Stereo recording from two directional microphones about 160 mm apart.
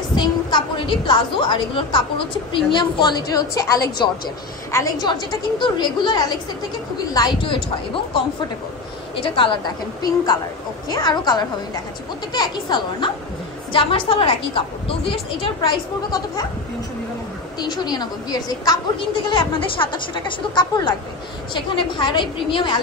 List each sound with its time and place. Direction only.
0.1 s a woman's voice: 30° left (ahead or behind)
10.9 s a woman's voice: 25° left (ahead or behind)
17.6 s a woman's voice: 25° left (ahead or behind)